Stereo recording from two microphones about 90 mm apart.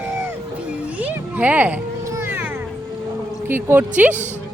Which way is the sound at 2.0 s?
25° right (ahead or behind).